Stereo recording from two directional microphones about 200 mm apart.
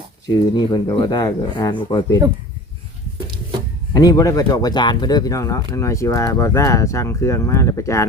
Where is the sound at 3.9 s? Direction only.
20° left (ahead or behind).